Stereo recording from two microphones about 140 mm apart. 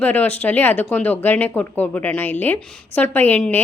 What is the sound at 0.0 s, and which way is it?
Speech, 10° left (ahead or behind).